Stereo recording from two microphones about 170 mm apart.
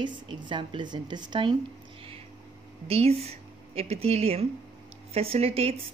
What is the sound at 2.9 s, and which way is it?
Speech, 35° right (ahead or behind).